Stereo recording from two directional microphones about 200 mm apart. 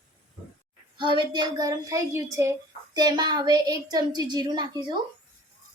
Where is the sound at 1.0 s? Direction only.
25° right (ahead or behind).